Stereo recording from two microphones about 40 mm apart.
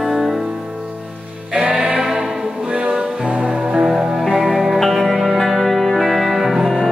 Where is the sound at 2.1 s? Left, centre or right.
Centre.